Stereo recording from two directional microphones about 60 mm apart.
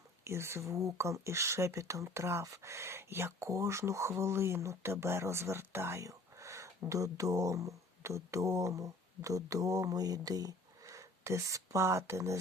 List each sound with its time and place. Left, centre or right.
0.3 s speech: right
6.1 s speech: right